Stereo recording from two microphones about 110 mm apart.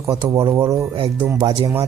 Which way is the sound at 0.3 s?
30° right (ahead or behind).